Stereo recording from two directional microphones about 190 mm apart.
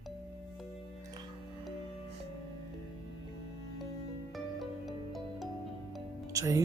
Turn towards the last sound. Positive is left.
turn(degrees=-15)  # may be behind; listen again after turning